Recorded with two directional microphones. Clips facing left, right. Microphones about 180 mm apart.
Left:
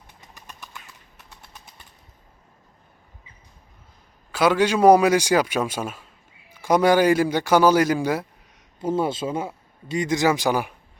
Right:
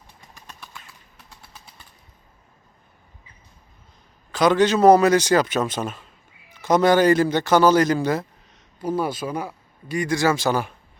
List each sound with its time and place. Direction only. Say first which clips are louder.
0.3 s bird: even; 5° left (ahead or behind)
4.3 s a man's voice: right 2 dB; 10° left (ahead or behind)
8.8 s speech: left 1 dB; 25° left (ahead or behind)